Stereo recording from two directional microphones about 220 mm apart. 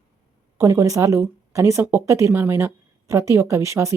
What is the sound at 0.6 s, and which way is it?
Speech, 15° right (ahead or behind).